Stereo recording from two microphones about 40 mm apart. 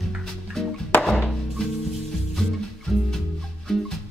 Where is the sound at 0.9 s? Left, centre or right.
Left.